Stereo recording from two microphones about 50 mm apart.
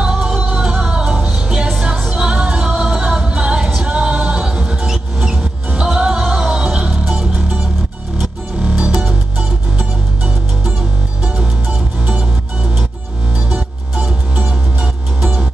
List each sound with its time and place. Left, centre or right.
0.0 s music: centre
8.6 s music: right
9.0 s music: centre
14.4 s music: centre